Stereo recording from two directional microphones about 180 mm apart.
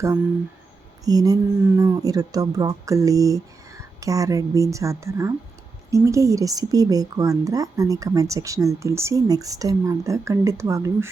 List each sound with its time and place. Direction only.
1.0 s speech: 20° right (ahead or behind)